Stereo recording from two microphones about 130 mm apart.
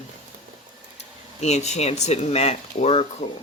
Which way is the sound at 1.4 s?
60° left (ahead or behind).